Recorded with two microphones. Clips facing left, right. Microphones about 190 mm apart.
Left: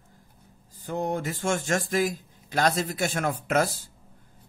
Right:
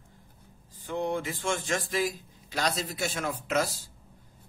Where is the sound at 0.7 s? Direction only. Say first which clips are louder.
Left 2 dB; 40° left (ahead or behind).